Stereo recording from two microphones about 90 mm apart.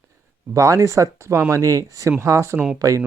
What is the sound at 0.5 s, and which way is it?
Speech, 35° right (ahead or behind).